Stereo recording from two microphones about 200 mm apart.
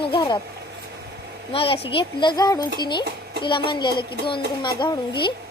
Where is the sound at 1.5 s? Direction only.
25° left (ahead or behind).